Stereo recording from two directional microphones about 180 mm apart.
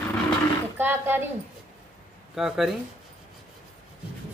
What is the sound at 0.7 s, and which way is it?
Speech, 10° right (ahead or behind).